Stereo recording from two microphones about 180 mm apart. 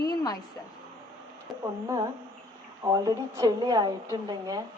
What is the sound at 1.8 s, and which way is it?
A woman's voice, 15° right (ahead or behind).